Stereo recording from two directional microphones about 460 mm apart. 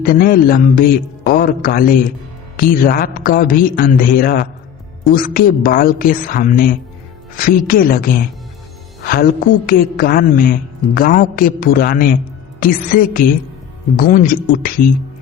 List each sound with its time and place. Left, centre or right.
0.0 s a woman's voice: centre